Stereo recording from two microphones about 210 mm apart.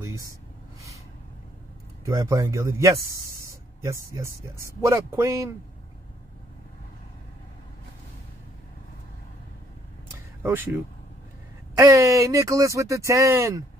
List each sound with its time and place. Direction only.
2.0 s speech: 15° right (ahead or behind)
10.4 s speech: 10° right (ahead or behind)